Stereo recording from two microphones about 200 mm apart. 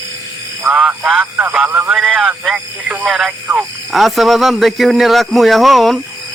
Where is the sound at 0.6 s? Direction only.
10° right (ahead or behind).